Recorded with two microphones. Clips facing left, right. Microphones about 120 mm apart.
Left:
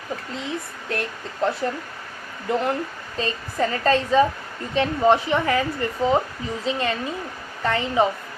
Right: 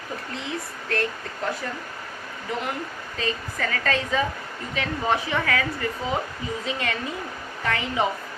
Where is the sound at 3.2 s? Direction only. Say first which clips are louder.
Left 4 dB; 30° left (ahead or behind).